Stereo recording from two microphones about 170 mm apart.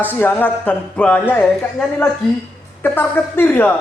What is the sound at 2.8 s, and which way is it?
Speech, 10° left (ahead or behind).